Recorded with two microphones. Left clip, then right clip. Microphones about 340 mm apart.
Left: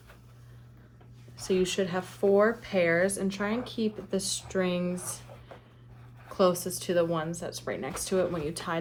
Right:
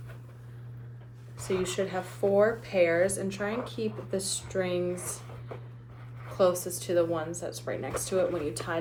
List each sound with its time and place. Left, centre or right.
1.6 s speech: centre
6.3 s speech: centre